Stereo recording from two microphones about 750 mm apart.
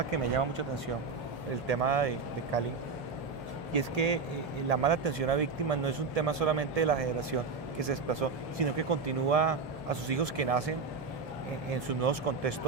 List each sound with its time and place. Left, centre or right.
0.1 s a man's voice: right
1.6 s a man's voice: right
3.7 s a man's voice: right
11.7 s a man's voice: right